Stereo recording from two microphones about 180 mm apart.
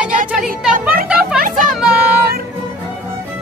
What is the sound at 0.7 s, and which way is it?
Music, 50° right (ahead or behind).